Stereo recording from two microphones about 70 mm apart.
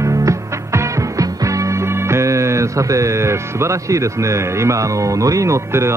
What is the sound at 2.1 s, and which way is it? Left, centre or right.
Speech, right.